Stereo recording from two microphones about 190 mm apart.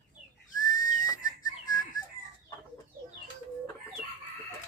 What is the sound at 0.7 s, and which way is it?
Whistle, 20° left (ahead or behind).